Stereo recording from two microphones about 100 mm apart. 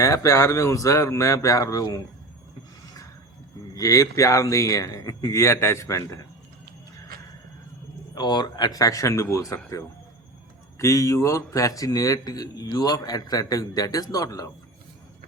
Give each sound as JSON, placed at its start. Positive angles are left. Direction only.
{"t": 0.0, "sound": "a man's voice", "side_deg": 35}
{"t": 3.8, "sound": "a man's voice", "side_deg": 35}
{"t": 8.1, "sound": "a man's voice", "side_deg": 45}
{"t": 10.8, "sound": "a man's voice", "side_deg": 30}